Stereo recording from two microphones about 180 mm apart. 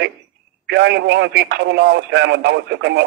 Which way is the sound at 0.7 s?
70° right (ahead or behind).